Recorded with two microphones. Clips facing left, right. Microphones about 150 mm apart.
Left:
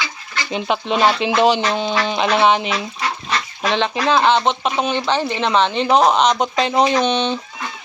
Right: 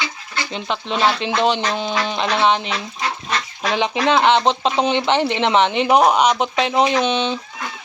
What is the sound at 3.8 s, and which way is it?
Speech, 15° right (ahead or behind).